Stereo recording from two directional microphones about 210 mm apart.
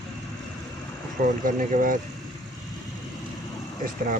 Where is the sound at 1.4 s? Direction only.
40° right (ahead or behind).